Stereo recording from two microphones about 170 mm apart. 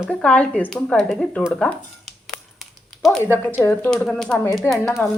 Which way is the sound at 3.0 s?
Centre (ahead or behind).